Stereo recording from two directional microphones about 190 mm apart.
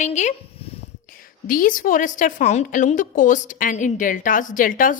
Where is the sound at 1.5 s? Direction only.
45° left (ahead or behind).